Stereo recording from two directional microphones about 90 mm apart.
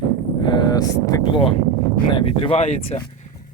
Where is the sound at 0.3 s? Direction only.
60° left (ahead or behind).